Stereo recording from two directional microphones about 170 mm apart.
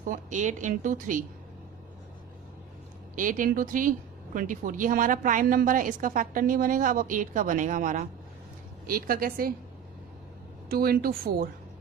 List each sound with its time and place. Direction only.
0.1 s a woman's voice: 45° right (ahead or behind)
3.2 s a woman's voice: 50° right (ahead or behind)
10.7 s speech: 60° right (ahead or behind)